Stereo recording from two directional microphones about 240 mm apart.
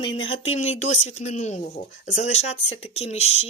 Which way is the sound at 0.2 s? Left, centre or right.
Left.